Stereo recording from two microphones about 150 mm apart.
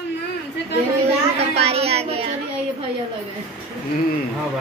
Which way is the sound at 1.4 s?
45° right (ahead or behind).